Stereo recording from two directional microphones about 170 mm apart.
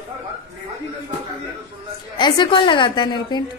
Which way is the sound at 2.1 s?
25° left (ahead or behind).